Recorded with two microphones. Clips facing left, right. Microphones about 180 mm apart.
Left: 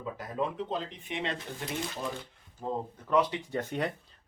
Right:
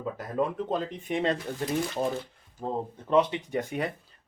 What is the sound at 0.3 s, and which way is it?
Speech, 50° right (ahead or behind).